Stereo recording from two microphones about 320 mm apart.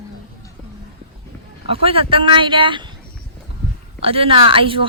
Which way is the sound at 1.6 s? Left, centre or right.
Centre.